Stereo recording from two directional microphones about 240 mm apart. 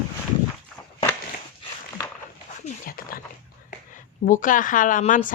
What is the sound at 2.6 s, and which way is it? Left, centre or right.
Dog, left.